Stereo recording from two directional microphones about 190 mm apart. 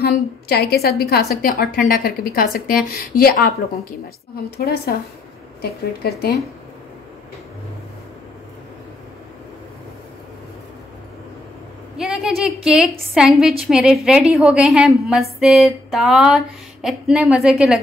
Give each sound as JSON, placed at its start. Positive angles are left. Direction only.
{"t": 0.0, "sound": "a woman's voice", "side_deg": 55}
{"t": 4.6, "sound": "a woman's voice", "side_deg": 55}
{"t": 12.0, "sound": "speech", "side_deg": 0}
{"t": 13.1, "sound": "a sound", "side_deg": 0}